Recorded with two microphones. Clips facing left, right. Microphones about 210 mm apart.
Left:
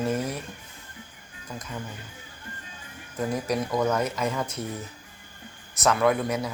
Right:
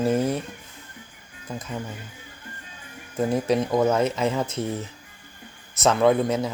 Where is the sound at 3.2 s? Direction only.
25° right (ahead or behind).